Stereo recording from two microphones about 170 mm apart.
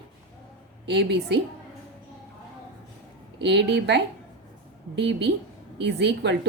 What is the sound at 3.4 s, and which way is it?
A woman's voice, 90° right.